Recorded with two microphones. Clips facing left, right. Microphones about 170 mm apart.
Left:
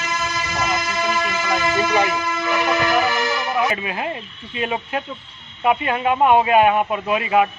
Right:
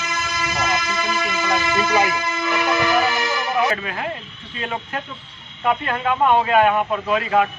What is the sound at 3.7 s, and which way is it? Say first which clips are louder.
A man's voice: left 1 dB; 15° left (ahead or behind).